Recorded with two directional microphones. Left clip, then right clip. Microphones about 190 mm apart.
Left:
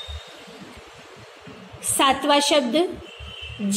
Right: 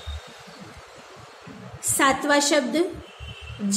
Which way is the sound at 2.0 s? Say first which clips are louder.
Left 2 dB; 10° left (ahead or behind).